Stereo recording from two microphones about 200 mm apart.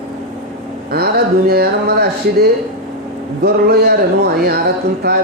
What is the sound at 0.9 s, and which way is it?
Speech, 50° right (ahead or behind).